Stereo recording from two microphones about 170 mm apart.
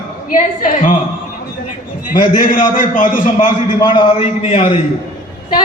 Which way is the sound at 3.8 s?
30° left (ahead or behind).